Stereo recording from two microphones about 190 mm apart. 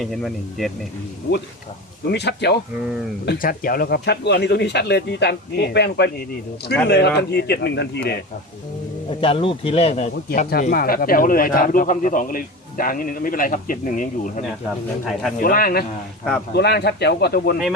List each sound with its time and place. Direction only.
0.0 s speech: centre (ahead or behind)
2.0 s speech: 65° left (ahead or behind)
3.2 s speech: 50° left (ahead or behind)
9.0 s speech: 30° left (ahead or behind)
10.2 s speech: 50° left (ahead or behind)